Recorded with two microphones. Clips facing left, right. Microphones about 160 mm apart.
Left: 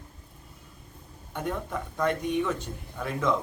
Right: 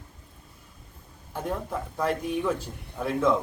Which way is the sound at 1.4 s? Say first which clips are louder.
Right 1 dB; 5° right (ahead or behind).